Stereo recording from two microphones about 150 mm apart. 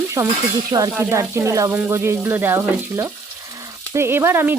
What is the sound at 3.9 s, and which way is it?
Speech, 15° right (ahead or behind).